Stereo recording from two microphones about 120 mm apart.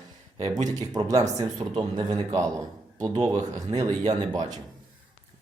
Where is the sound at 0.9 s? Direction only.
30° right (ahead or behind).